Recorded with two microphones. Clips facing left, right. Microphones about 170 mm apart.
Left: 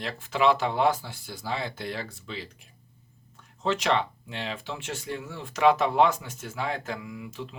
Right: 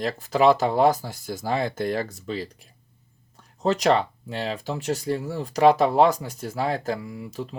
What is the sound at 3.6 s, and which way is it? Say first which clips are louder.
Speech: right 5 dB; 40° right (ahead or behind).